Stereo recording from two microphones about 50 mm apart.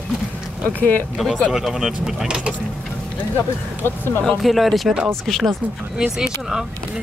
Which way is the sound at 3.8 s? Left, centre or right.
Left.